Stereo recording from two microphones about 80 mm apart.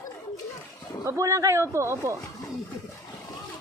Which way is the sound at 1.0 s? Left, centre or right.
Right.